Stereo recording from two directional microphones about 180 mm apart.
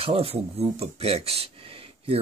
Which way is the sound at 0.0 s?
30° right (ahead or behind).